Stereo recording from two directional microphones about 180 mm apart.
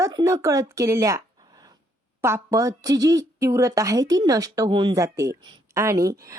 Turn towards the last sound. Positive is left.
turn(degrees=-20)  # may be behind; listen again after turning